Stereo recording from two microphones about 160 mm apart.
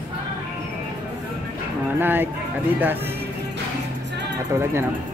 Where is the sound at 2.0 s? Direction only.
15° right (ahead or behind).